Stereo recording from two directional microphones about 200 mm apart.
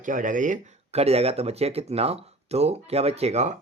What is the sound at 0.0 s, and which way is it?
Speech, 40° right (ahead or behind).